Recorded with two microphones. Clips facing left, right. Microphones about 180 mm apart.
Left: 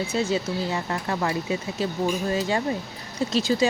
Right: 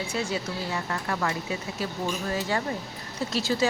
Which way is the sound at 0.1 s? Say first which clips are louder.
Left 5 dB; 25° left (ahead or behind).